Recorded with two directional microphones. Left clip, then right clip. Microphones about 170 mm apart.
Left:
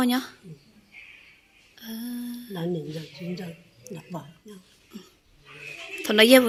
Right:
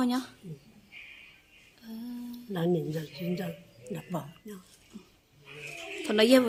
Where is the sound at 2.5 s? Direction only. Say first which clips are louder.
Right 2 dB; 45° right (ahead or behind).